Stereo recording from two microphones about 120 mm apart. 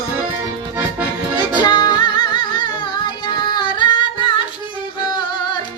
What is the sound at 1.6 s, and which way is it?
Music, 40° left (ahead or behind).